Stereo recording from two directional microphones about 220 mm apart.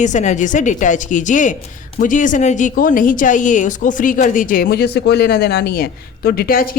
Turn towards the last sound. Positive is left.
turn(degrees=40)  # may be behind; listen again after turning